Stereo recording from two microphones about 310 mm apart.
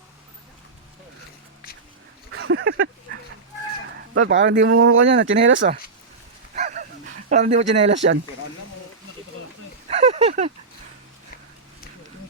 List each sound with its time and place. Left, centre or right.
2.3 s a sound: right
4.1 s speech: right
6.6 s dog: right
7.3 s speech: right
7.9 s speech: right
9.9 s a sound: right